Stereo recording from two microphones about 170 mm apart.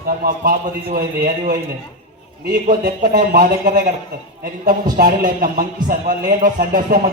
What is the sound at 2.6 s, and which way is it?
Speech, 50° right (ahead or behind).